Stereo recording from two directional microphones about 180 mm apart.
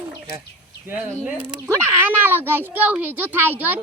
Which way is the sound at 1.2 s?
10° right (ahead or behind).